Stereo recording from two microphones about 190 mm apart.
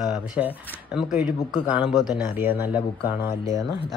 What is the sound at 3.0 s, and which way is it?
Speech, 25° left (ahead or behind).